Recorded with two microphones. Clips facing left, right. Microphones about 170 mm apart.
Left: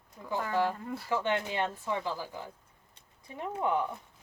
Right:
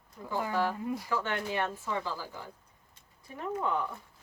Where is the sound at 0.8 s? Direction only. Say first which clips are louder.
Right 4 dB; 15° right (ahead or behind).